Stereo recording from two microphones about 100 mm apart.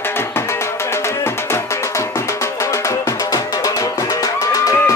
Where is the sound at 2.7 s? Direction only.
35° left (ahead or behind).